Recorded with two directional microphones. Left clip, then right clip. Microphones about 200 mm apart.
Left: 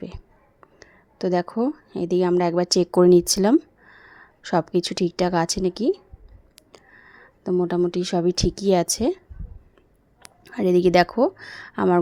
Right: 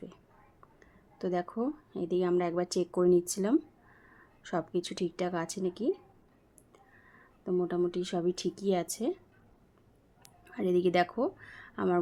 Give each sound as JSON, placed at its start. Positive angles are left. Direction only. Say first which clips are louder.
{"t": 0.8, "sound": "speech", "louder": "left 10 dB", "side_deg": 40}
{"t": 10.2, "sound": "speech", "louder": "left 10 dB", "side_deg": 45}